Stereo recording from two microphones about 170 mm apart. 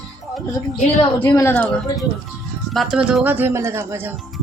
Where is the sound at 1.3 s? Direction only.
10° left (ahead or behind); by 4.1 s 15° right (ahead or behind).